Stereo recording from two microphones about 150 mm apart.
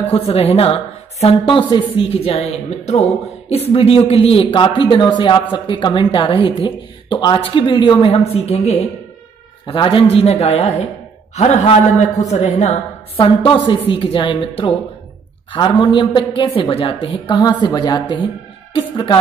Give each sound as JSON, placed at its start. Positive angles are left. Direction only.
{"t": 0.1, "sound": "speech", "side_deg": 40}
{"t": 8.1, "sound": "a woman's voice", "side_deg": 40}